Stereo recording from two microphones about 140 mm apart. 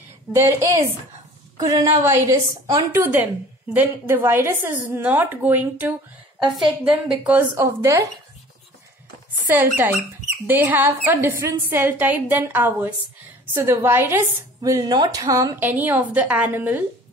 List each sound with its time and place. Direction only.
0.3 s a woman's voice: 20° right (ahead or behind)
1.6 s a woman's voice: 25° right (ahead or behind); by 7.4 s 10° right (ahead or behind)
7.5 s a woman's voice: 20° right (ahead or behind)
9.5 s a woman's voice: 15° right (ahead or behind)
15.7 s speech: 10° right (ahead or behind)